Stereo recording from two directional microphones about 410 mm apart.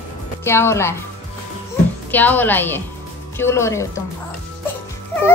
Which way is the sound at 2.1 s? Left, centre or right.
Centre.